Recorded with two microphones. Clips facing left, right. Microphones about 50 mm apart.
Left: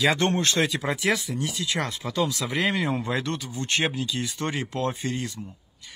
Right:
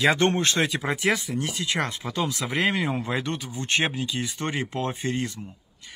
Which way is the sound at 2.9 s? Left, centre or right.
Centre.